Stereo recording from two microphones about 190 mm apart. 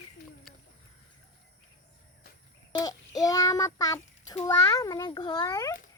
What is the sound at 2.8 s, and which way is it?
A child's voice, 20° left (ahead or behind).